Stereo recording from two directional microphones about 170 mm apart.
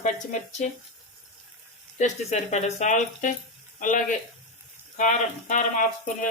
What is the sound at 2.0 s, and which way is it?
Speech, 45° left (ahead or behind).